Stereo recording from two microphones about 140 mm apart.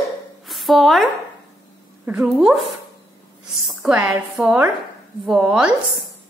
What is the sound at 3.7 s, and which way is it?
A woman's voice, 5° right (ahead or behind).